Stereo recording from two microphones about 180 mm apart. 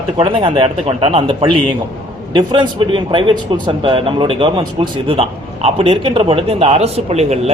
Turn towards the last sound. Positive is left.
turn(degrees=-35)  # may be behind; listen again after turning